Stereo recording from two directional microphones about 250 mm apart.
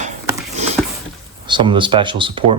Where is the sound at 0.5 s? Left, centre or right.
Right.